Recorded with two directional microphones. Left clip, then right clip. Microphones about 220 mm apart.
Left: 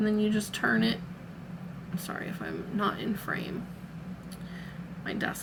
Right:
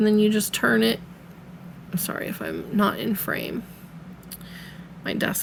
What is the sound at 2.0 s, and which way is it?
Speech, 50° right (ahead or behind).